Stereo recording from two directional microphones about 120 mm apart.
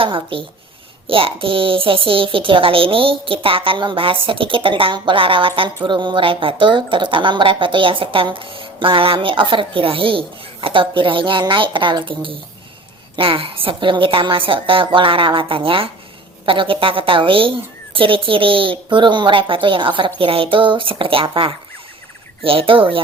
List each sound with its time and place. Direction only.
0.0 s a child's voice: 45° right (ahead or behind)